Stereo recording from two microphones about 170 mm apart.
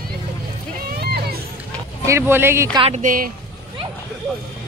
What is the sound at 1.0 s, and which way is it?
Music, 70° right (ahead or behind).